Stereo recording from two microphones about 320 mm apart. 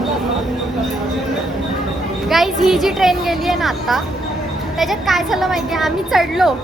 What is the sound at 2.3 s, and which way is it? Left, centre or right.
A woman's voice, centre.